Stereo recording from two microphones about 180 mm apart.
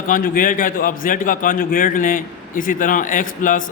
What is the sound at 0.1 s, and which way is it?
A man's voice, 50° left (ahead or behind).